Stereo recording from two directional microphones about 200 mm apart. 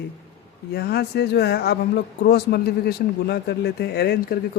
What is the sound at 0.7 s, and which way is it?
Speech, 55° left (ahead or behind).